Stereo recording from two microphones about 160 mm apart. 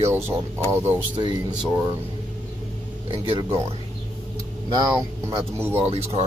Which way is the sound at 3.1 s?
30° right (ahead or behind).